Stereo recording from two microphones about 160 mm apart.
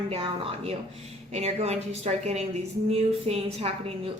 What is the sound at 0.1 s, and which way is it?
A woman's voice, 35° right (ahead or behind).